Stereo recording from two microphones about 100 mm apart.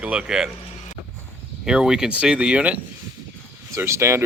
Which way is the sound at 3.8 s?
25° right (ahead or behind).